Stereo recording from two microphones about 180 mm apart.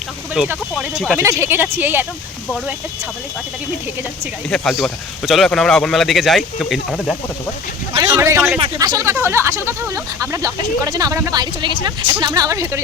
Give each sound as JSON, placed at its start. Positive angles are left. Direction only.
{"t": 0.4, "sound": "speech", "side_deg": -5}
{"t": 4.4, "sound": "speech", "side_deg": 5}
{"t": 7.9, "sound": "speech", "side_deg": -15}